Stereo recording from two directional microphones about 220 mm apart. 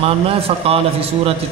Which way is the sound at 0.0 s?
25° right (ahead or behind).